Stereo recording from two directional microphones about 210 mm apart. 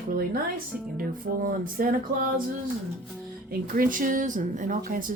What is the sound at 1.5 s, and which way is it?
Speech, 40° right (ahead or behind).